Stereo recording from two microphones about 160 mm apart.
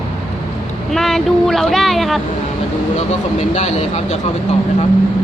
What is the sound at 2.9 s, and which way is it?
Speech, 45° left (ahead or behind).